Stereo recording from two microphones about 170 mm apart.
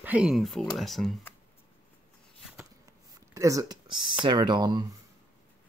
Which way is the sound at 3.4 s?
20° right (ahead or behind).